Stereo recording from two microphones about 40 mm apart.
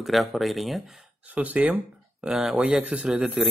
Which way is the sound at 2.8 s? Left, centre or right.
Right.